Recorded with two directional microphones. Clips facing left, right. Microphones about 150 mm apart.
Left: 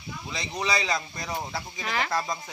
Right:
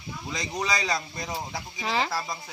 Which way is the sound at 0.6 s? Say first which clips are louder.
Left 1 dB; 40° right (ahead or behind).